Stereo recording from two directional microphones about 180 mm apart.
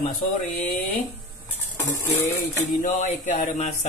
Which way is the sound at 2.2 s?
45° left (ahead or behind).